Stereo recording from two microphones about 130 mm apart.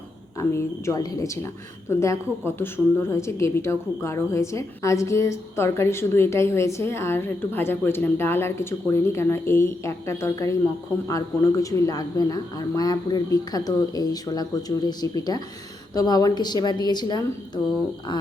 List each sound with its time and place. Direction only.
0.3 s a woman's voice: 25° left (ahead or behind)